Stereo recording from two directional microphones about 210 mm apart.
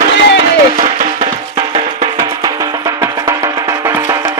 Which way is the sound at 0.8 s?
30° right (ahead or behind).